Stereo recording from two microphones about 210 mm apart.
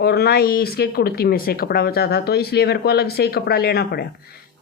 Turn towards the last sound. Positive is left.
turn(degrees=50)  # may be behind; listen again after turning